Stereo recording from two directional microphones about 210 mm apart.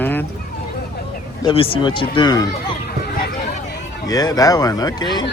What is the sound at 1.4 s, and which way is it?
Speech, 25° left (ahead or behind).